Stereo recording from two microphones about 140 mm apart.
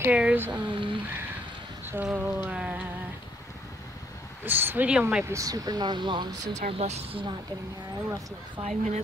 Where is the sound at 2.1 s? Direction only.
15° right (ahead or behind).